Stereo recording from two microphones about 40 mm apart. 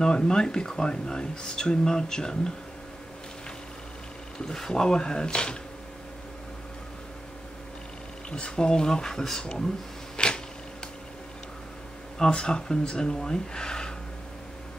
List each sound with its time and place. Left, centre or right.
0.0 s speech: left
4.4 s speech: centre
8.3 s speech: left
9.4 s speech: left
10.1 s a sound: left
12.2 s speech: left